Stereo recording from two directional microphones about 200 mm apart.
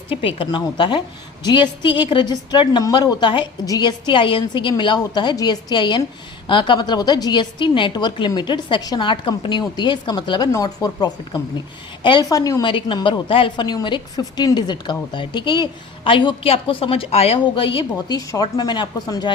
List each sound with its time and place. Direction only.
0.1 s a woman's voice: 25° left (ahead or behind)